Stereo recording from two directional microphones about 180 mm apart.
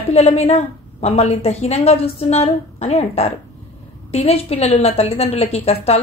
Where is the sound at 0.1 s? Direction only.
35° left (ahead or behind).